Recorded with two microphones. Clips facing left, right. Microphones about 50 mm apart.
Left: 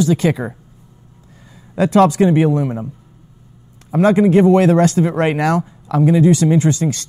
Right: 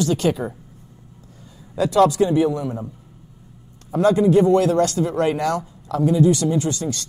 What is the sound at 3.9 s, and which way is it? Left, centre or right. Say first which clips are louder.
Speech: left 3 dB; left.